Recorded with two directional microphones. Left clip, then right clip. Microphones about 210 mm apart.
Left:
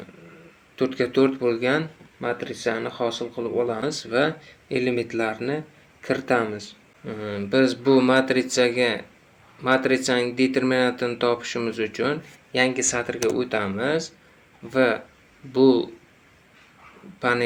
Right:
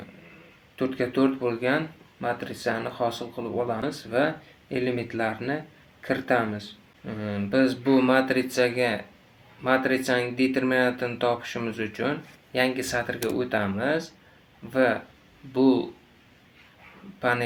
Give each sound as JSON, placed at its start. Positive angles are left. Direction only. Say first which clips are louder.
{"t": 0.8, "sound": "speech", "louder": "left 4 dB", "side_deg": 40}
{"t": 17.2, "sound": "a man's voice", "louder": "left 2 dB", "side_deg": 40}